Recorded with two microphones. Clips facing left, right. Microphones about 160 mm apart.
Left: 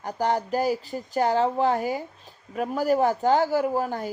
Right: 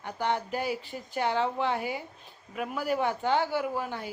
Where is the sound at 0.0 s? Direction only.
40° left (ahead or behind).